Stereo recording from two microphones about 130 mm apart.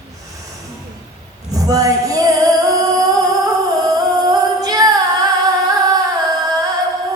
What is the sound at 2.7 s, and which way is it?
Humming, 30° right (ahead or behind).